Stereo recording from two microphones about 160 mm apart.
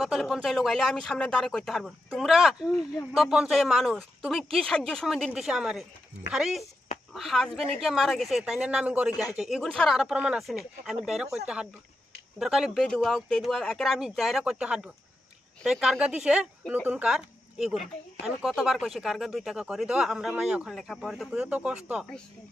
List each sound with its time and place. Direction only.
0.0 s speech: centre (ahead or behind)